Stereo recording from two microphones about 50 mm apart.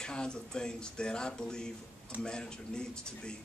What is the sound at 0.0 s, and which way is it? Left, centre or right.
A man's voice, centre.